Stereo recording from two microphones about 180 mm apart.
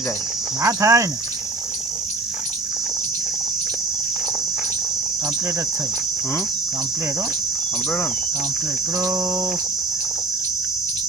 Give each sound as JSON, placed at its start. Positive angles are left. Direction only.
{"t": 0.6, "sound": "speech", "side_deg": -15}
{"t": 9.0, "sound": "cricket", "side_deg": -20}